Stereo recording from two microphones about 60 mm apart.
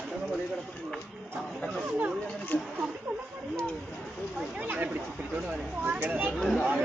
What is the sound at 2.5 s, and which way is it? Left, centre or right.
Speech, left.